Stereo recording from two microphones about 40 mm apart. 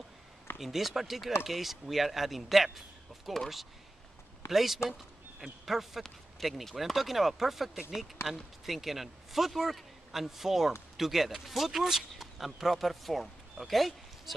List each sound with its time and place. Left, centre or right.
0.6 s speech: centre
4.5 s speech: centre